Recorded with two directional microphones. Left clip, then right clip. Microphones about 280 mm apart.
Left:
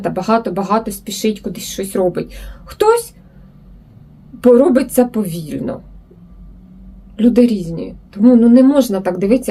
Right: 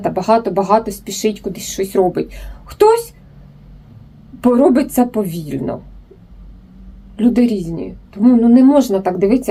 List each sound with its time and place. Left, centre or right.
0.0 s speech: centre
4.4 s speech: centre
7.2 s speech: centre